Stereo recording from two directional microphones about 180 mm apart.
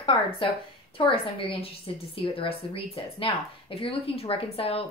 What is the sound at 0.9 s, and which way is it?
A woman's voice, 30° left (ahead or behind).